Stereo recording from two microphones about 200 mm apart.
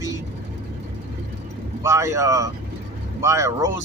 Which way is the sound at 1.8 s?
15° right (ahead or behind).